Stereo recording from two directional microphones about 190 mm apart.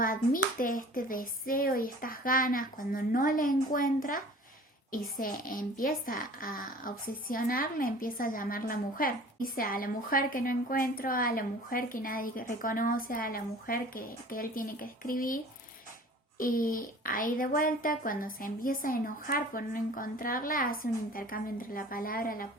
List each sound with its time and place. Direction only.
0.6 s a woman's voice: 45° left (ahead or behind)
16.4 s a woman's voice: 50° left (ahead or behind)